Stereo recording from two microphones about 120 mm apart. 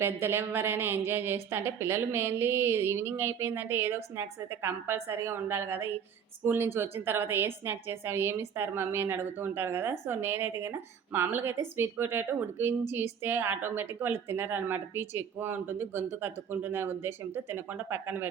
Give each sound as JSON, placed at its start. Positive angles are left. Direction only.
{"t": 0.0, "sound": "a woman's voice", "side_deg": -20}